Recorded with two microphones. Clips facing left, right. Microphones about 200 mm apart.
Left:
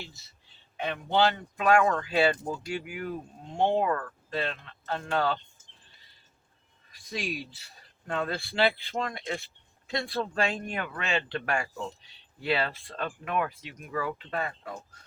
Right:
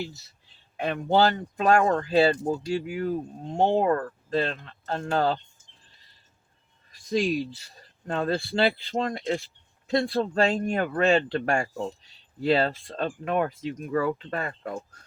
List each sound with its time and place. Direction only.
0.9 s speech: 50° right (ahead or behind)
1.5 s speech: 35° right (ahead or behind)
7.1 s speech: 30° right (ahead or behind)
13.9 s speech: 45° right (ahead or behind)